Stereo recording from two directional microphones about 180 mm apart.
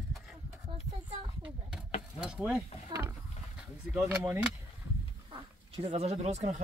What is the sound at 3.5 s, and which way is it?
Speech, 5° right (ahead or behind).